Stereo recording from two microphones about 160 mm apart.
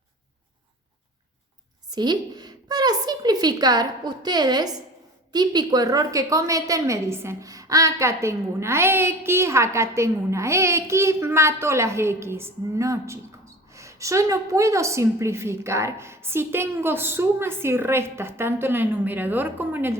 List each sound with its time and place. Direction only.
1.9 s a woman's voice: 25° right (ahead or behind)